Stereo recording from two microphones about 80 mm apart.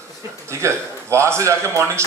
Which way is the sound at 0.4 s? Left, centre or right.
Right.